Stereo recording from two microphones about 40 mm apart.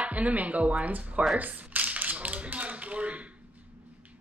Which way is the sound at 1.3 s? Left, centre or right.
Right.